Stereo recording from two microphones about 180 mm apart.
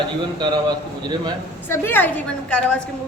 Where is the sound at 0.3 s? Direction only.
25° right (ahead or behind).